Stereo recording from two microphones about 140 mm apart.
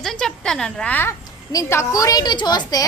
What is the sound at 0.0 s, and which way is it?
A woman's voice, centre (ahead or behind).